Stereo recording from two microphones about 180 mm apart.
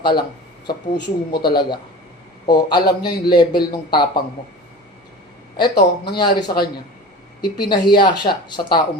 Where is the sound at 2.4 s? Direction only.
25° left (ahead or behind).